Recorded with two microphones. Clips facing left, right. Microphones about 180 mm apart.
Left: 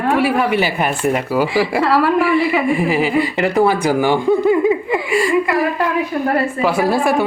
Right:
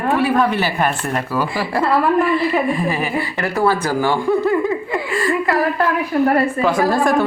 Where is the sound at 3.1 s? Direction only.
20° left (ahead or behind).